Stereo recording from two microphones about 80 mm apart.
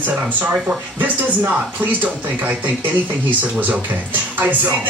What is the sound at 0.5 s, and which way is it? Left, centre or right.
Speech, centre.